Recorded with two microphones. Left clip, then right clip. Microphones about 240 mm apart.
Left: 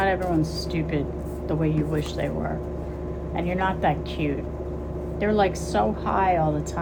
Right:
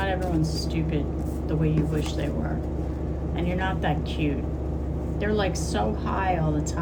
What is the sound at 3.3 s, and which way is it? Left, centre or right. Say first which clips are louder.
A woman's voice: left 4 dB; left.